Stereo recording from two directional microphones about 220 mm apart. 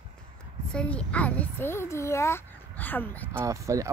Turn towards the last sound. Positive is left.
turn(degrees=-15)  # may be behind; listen again after turning